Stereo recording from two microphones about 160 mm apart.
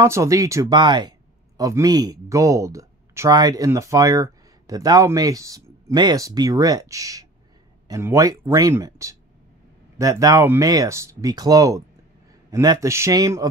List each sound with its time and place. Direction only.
0.0 s speech: 20° right (ahead or behind)